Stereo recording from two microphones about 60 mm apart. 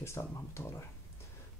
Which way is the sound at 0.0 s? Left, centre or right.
Left.